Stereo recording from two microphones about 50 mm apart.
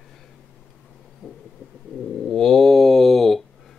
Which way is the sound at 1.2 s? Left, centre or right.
Centre.